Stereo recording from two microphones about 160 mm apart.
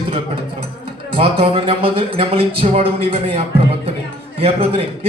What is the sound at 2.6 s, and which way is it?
Speech, 45° right (ahead or behind).